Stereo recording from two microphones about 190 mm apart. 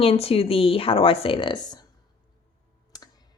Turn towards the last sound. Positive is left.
turn(degrees=20)  # may be behind; listen again after turning